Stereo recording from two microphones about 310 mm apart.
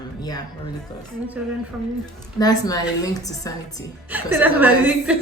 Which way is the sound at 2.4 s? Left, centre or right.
Centre.